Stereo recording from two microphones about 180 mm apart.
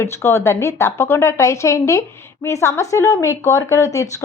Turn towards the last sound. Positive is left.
turn(degrees=20)  # may be behind; listen again after turning